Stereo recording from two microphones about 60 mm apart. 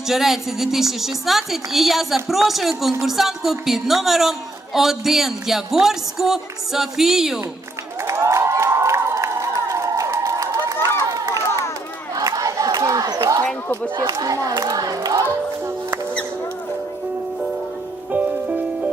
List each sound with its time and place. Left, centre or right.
0.1 s a woman's voice: centre
8.0 s crowd: right
12.1 s battle cry: right
13.4 s a sound: left
14.1 s crowd: right
18.1 s music: right